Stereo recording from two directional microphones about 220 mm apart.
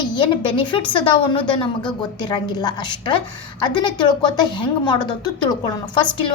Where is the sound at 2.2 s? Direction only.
20° left (ahead or behind).